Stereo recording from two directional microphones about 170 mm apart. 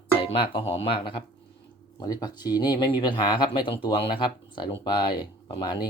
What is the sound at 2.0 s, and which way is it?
Speech, 25° left (ahead or behind).